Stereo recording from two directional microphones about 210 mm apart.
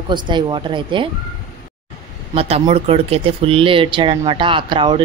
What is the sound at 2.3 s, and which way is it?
Speech, 30° right (ahead or behind).